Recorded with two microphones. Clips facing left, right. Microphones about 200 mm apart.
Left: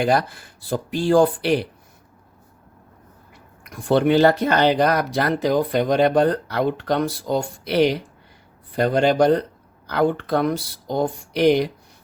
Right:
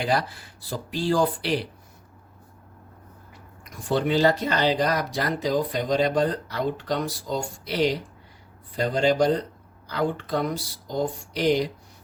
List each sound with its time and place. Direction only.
0.0 s speech: 50° left (ahead or behind)
3.6 s speech: 60° left (ahead or behind)